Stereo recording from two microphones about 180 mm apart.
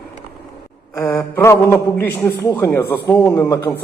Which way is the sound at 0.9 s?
15° left (ahead or behind).